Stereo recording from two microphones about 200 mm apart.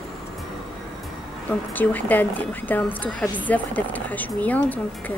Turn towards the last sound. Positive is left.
turn(degrees=10)  # may be behind; listen again after turning